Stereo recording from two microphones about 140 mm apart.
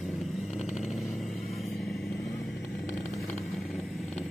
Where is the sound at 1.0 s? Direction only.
Centre (ahead or behind).